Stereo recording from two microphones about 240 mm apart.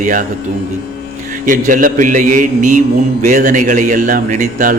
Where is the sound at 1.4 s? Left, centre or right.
Right.